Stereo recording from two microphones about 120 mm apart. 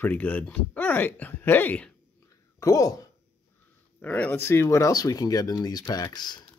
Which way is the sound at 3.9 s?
15° left (ahead or behind).